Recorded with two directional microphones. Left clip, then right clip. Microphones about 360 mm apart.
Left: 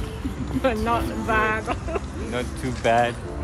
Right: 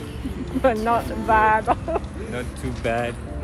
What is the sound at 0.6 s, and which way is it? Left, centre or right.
Speech, centre.